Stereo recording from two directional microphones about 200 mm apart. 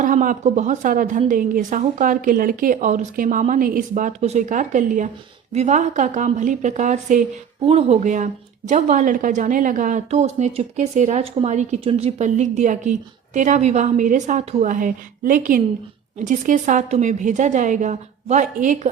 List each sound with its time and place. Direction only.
0.0 s a woman's voice: 40° right (ahead or behind)